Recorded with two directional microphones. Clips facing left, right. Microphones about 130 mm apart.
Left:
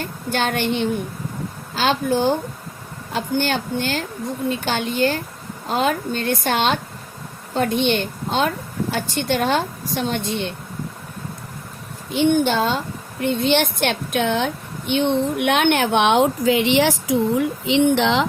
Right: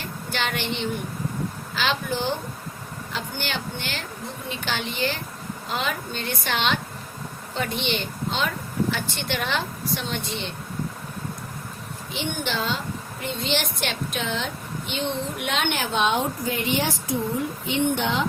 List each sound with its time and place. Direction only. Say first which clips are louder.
0.0 s a woman's voice: left 6 dB; 45° left (ahead or behind)
12.1 s a woman's voice: left 12 dB; 50° left (ahead or behind); by 18.3 s 90° left